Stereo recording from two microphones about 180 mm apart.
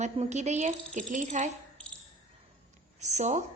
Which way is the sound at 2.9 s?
40° right (ahead or behind).